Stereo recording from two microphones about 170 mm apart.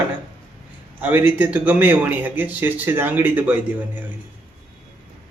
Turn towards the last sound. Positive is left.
turn(degrees=-10)  # may be behind; listen again after turning